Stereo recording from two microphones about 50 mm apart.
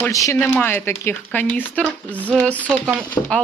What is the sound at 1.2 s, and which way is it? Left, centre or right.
Speech, left.